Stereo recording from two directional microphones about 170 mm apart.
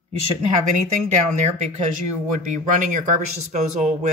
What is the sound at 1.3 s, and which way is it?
Speech, 45° right (ahead or behind).